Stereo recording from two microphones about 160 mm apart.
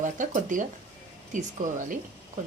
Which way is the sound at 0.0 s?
55° right (ahead or behind).